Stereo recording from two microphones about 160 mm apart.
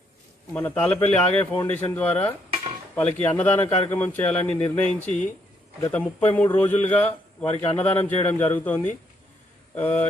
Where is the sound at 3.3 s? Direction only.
10° left (ahead or behind).